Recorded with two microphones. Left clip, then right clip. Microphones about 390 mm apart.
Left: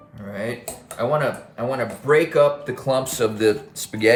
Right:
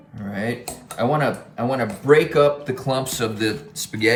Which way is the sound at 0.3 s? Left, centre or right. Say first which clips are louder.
Right 1 dB; centre.